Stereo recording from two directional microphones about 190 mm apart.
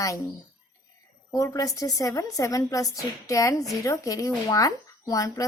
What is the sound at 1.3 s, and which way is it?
A woman's voice, 15° left (ahead or behind).